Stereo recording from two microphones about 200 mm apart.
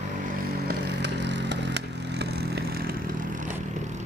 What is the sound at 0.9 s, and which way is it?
Vehicle, 60° right (ahead or behind).